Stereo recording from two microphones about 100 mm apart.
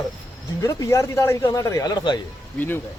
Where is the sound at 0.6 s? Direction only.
35° left (ahead or behind).